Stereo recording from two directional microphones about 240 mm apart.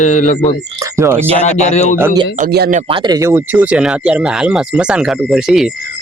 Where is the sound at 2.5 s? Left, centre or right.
Right.